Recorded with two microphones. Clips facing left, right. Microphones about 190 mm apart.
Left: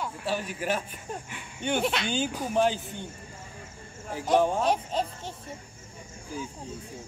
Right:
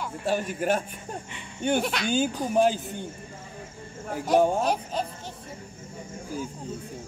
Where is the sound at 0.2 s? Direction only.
50° right (ahead or behind).